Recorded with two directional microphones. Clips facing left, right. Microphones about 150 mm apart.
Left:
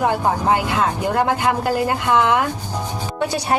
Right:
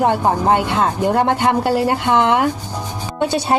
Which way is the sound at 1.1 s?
30° right (ahead or behind).